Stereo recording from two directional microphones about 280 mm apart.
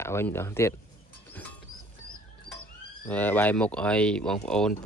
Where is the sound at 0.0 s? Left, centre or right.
Centre.